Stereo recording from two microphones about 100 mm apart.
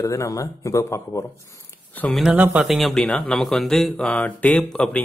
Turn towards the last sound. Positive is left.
turn(degrees=10)  # may be behind; listen again after turning